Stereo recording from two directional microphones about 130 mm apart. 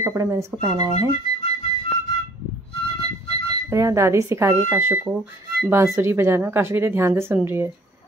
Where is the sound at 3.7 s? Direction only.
25° right (ahead or behind).